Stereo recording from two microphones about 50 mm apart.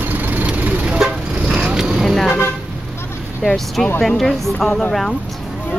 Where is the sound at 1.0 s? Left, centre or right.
Centre.